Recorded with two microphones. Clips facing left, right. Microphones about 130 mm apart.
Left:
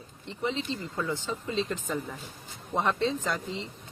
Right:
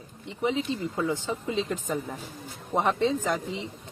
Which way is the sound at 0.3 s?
15° right (ahead or behind).